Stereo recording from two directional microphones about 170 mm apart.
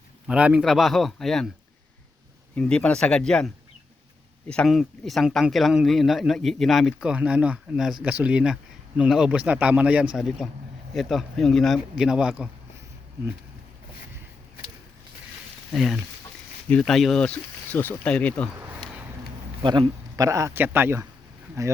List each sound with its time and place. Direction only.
0.3 s speech: 5° right (ahead or behind)
2.6 s a man's voice: 5° left (ahead or behind)
15.7 s speech: centre (ahead or behind)
19.6 s a man's voice: 25° right (ahead or behind)